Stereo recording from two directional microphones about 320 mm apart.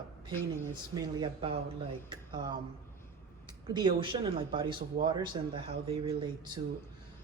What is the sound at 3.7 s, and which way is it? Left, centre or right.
Speech, centre.